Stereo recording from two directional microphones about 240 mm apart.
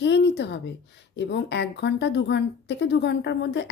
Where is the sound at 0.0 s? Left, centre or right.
Left.